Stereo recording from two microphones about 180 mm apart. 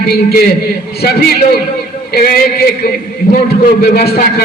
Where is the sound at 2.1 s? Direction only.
55° left (ahead or behind).